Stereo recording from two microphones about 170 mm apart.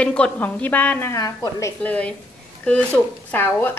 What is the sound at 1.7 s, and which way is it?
A woman's voice, 5° left (ahead or behind).